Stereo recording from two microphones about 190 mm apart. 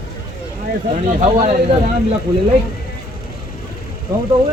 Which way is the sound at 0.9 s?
35° right (ahead or behind).